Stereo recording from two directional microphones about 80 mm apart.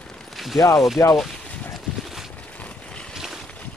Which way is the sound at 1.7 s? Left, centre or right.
Centre.